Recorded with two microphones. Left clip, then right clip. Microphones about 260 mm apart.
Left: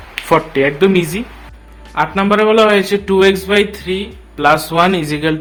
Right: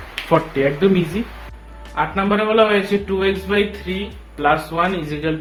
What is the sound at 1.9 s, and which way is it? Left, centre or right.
A man's voice, left.